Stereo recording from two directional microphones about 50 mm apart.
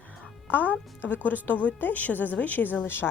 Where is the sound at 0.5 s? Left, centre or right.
Left.